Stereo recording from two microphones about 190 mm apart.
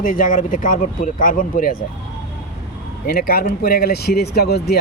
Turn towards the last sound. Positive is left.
turn(degrees=55)  # may be behind; listen again after turning